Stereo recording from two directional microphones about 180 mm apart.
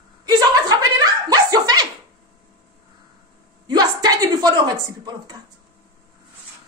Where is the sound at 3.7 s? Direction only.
20° right (ahead or behind).